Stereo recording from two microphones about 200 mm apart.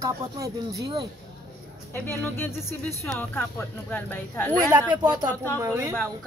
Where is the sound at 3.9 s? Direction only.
10° left (ahead or behind).